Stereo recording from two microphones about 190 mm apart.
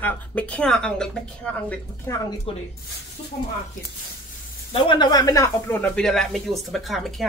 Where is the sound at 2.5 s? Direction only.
30° left (ahead or behind).